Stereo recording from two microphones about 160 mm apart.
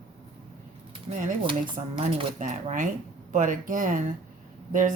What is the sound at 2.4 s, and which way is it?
A woman's voice, 55° right (ahead or behind).